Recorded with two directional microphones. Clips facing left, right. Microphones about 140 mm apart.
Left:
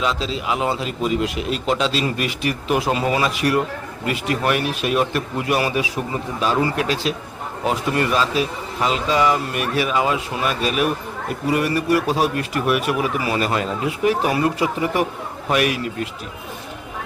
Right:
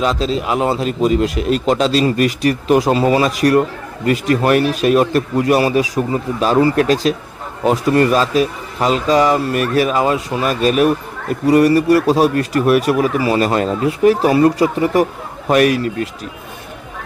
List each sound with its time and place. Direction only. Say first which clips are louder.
0.0 s a man's voice: right 6 dB; 40° right (ahead or behind)